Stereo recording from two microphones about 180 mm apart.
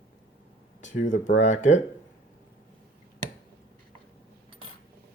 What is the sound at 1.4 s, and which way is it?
Speech, 40° left (ahead or behind).